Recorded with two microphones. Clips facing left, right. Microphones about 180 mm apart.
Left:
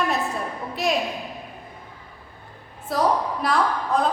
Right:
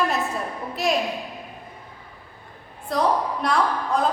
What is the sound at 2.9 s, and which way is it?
A man's voice, 5° left (ahead or behind).